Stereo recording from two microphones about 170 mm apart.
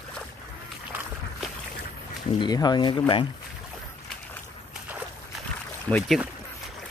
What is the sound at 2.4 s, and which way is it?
Speech, 25° left (ahead or behind).